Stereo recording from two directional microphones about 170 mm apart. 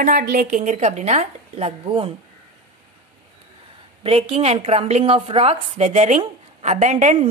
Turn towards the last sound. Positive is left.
turn(degrees=-45)  # may be behind; listen again after turning